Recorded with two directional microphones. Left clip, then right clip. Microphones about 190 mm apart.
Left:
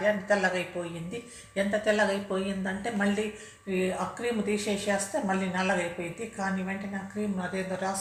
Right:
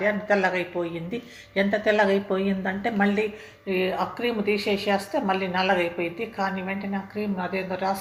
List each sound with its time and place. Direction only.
0.0 s a woman's voice: 35° right (ahead or behind)